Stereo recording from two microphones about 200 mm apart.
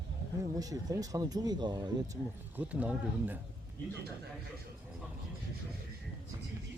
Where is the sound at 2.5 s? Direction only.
5° right (ahead or behind).